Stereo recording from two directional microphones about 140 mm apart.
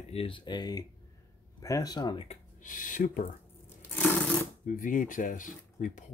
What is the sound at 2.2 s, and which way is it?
Speech, 70° left (ahead or behind).